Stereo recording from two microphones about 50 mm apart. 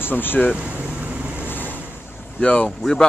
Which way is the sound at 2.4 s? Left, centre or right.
Left.